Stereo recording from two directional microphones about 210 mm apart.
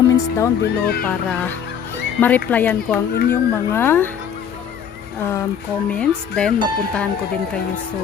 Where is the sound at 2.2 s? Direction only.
10° left (ahead or behind).